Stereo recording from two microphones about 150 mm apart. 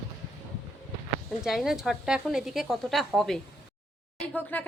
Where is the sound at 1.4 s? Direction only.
Centre (ahead or behind).